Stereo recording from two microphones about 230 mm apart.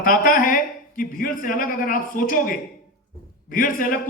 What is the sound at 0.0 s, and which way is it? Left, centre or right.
Speech, left.